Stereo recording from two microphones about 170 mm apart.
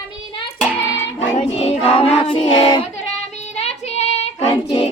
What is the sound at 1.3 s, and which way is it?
Music, 35° left (ahead or behind).